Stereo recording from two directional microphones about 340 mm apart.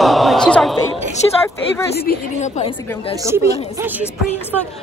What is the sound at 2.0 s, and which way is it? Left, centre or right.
A woman's voice, left.